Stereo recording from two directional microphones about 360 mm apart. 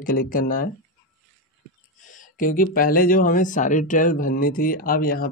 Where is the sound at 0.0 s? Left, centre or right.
Left.